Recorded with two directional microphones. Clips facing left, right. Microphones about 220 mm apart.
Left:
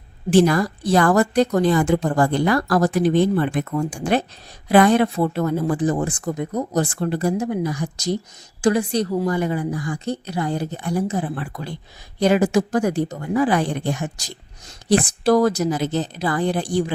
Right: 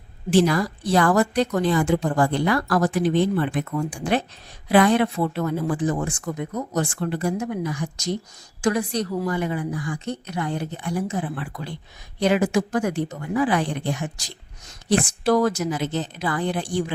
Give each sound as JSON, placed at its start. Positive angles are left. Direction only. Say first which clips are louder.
{"t": 0.3, "sound": "a woman's voice", "louder": "left 3 dB", "side_deg": 50}